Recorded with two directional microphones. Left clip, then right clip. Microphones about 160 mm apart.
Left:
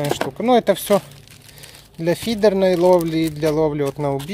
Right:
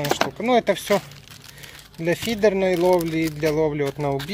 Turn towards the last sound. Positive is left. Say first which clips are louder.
# left 2 dB
turn(degrees=20)  # may be behind; listen again after turning